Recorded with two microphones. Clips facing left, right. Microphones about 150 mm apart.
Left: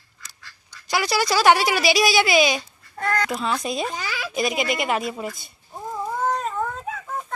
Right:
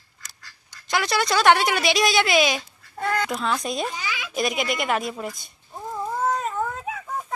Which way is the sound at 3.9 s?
40° left (ahead or behind).